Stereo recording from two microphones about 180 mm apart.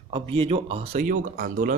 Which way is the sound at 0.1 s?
30° right (ahead or behind).